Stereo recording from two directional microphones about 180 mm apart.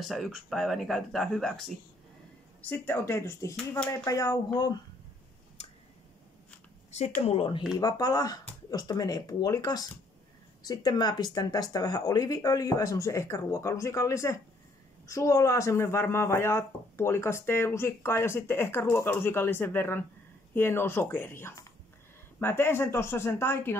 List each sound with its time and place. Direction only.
0.0 s speech: centre (ahead or behind); by 4.7 s 20° left (ahead or behind)
7.2 s speech: 35° left (ahead or behind)
7.7 s speech: 20° left (ahead or behind)